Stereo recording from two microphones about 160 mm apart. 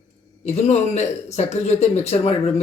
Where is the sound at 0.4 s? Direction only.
45° left (ahead or behind).